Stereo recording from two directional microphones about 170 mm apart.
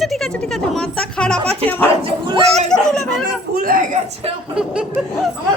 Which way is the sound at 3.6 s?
55° right (ahead or behind).